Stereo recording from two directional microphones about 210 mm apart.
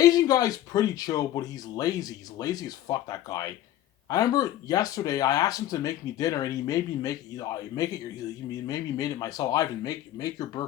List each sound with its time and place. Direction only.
0.0 s speech: 15° left (ahead or behind)